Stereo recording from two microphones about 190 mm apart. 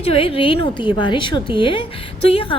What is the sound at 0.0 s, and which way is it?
A woman's voice, 30° left (ahead or behind).